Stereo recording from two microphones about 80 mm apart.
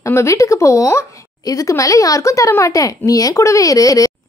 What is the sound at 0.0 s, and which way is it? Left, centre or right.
A woman's voice, left.